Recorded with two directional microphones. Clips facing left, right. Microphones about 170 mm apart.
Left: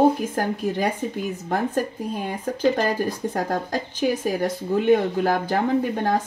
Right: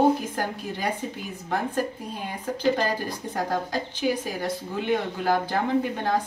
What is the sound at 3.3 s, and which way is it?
Speech, 45° left (ahead or behind).